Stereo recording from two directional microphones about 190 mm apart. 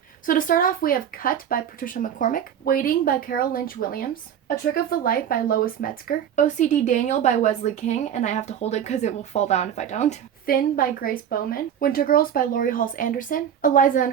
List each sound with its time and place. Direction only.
0.3 s a woman's voice: 45° left (ahead or behind)